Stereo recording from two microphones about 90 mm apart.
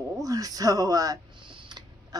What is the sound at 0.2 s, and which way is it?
Speech, 40° right (ahead or behind).